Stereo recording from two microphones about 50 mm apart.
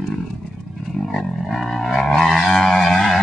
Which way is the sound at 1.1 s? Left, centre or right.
Centre.